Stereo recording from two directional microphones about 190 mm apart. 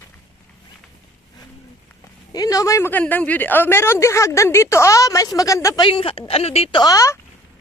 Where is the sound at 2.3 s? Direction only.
20° left (ahead or behind).